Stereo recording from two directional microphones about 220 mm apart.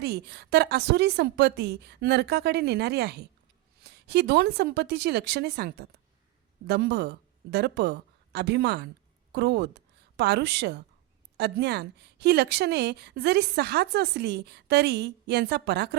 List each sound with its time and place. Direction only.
0.0 s a woman's voice: 50° right (ahead or behind)